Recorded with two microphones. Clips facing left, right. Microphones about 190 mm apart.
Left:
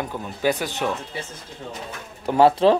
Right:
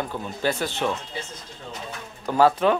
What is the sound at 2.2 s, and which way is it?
Speech, 25° left (ahead or behind).